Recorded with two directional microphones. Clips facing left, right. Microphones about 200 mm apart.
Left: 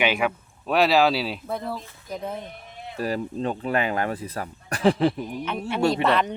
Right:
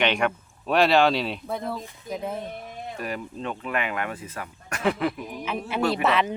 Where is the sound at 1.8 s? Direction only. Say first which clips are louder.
Right 5 dB; 15° right (ahead or behind).